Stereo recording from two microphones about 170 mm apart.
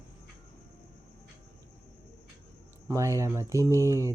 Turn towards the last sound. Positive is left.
turn(degrees=-20)  # may be behind; listen again after turning